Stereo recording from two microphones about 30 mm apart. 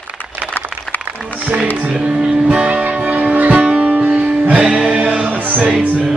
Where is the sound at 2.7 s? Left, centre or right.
Right.